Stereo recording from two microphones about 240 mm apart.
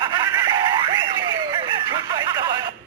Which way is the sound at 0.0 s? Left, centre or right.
Centre.